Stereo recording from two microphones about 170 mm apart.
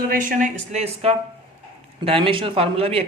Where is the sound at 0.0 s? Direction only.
55° right (ahead or behind).